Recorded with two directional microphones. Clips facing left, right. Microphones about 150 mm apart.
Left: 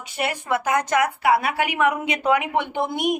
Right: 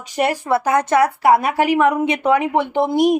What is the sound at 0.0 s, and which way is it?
A woman's voice, 40° right (ahead or behind).